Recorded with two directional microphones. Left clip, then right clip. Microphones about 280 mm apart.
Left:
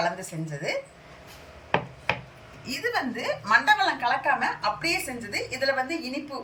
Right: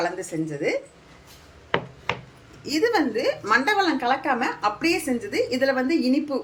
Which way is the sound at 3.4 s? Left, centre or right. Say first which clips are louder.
Left 1 dB; centre.